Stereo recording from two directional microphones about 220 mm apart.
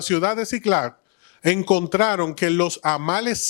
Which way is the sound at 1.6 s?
30° left (ahead or behind).